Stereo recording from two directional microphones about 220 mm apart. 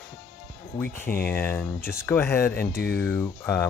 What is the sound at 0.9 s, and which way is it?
Speech, 10° left (ahead or behind).